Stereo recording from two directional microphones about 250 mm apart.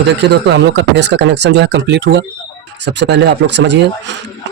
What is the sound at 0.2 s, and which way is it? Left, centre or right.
Speech, right.